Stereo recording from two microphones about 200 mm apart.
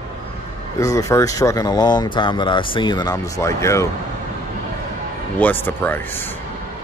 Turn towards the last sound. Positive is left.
turn(degrees=10)  # may be behind; listen again after turning